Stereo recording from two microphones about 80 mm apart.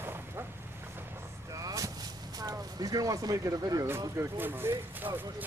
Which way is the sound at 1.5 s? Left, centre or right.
Right.